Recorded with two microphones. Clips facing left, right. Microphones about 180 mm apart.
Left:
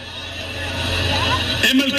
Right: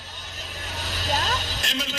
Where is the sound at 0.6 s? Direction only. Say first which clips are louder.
Left 9 dB; 70° left (ahead or behind).